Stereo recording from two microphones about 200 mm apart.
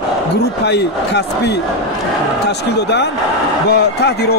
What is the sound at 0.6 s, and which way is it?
Speech, 60° left (ahead or behind).